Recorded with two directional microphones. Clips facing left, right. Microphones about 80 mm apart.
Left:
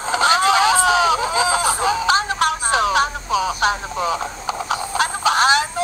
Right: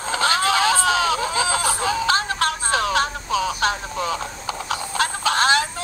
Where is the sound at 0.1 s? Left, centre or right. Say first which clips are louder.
Left 4 dB; centre.